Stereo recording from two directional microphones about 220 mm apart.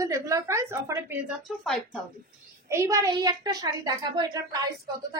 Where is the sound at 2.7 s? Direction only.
15° right (ahead or behind).